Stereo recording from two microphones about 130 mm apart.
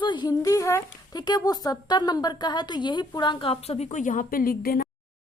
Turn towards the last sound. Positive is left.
turn(degrees=90)